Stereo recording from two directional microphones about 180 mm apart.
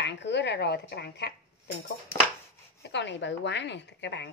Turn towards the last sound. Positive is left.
turn(degrees=75)  # may be behind; listen again after turning